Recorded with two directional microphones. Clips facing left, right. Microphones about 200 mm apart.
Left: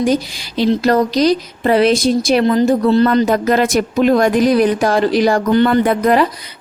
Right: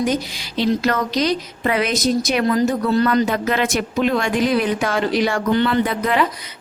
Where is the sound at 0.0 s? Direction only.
35° left (ahead or behind).